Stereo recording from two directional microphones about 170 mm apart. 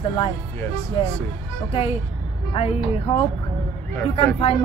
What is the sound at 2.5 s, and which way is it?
Speech, 35° left (ahead or behind).